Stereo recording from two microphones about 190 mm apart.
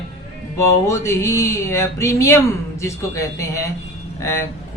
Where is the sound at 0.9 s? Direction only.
15° left (ahead or behind).